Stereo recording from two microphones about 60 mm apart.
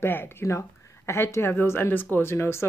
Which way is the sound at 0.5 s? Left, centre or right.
Left.